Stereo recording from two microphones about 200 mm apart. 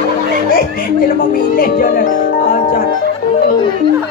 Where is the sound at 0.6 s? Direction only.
45° left (ahead or behind).